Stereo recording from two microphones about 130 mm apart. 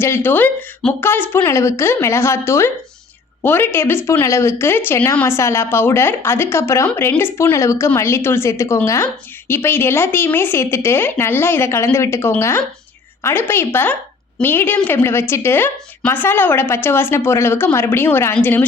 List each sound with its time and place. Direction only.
0.0 s a woman's voice: 20° left (ahead or behind)